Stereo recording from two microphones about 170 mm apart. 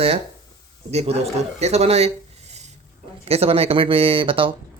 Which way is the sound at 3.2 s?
35° right (ahead or behind).